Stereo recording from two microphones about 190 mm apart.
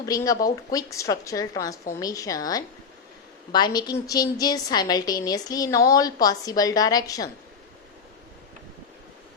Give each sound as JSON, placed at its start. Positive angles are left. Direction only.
{"t": 0.0, "sound": "a woman's voice", "side_deg": 20}